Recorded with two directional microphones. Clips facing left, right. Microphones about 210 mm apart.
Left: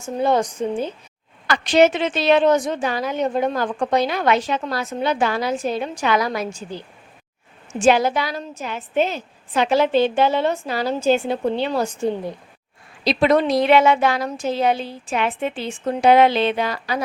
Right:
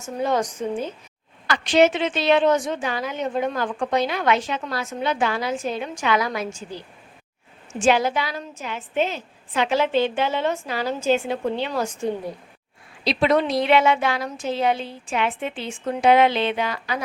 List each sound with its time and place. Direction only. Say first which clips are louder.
0.0 s a woman's voice: left 4 dB; 30° left (ahead or behind)
1.5 s a woman's voice: left 2 dB; 40° left (ahead or behind)
13.1 s a woman's voice: left 3 dB; 45° left (ahead or behind)